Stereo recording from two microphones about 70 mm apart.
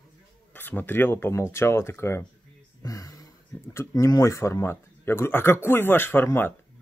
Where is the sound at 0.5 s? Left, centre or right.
Left.